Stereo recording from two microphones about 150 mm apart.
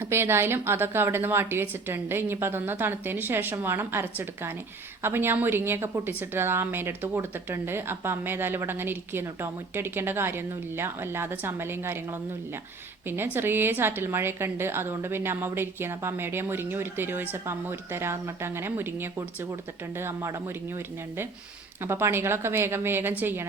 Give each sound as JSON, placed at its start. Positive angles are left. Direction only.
{"t": 0.0, "sound": "a woman's voice", "side_deg": -15}
{"t": 13.1, "sound": "a woman's voice", "side_deg": -15}
{"t": 21.8, "sound": "a woman's voice", "side_deg": -15}